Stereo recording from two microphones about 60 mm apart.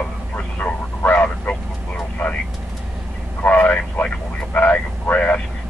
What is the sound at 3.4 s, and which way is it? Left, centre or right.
Vehicle, left.